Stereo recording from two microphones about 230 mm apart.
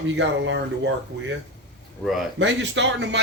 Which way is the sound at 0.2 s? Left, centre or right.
Right.